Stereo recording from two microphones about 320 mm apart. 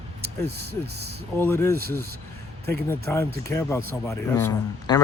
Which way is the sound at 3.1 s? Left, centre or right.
Centre.